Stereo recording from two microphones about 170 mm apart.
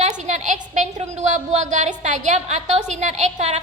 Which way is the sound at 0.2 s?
45° right (ahead or behind).